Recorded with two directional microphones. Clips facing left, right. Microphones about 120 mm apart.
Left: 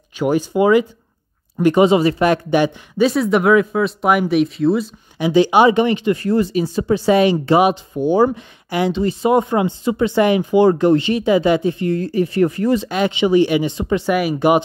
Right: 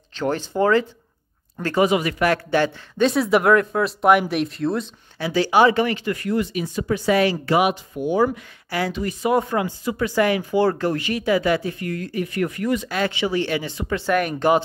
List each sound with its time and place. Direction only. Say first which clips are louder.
0.1 s speech: left 6 dB; 10° left (ahead or behind)
3.0 s speech: left 3 dB; centre (ahead or behind)
5.2 s speech: left 4 dB; 20° left (ahead or behind)
6.2 s speech: left 6 dB; 35° left (ahead or behind)
14.1 s speech: left 2 dB; 10° left (ahead or behind)